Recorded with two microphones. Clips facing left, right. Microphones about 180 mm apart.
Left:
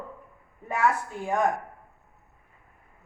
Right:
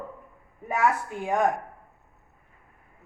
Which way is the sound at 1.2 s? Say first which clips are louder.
Right 1 dB; 15° right (ahead or behind).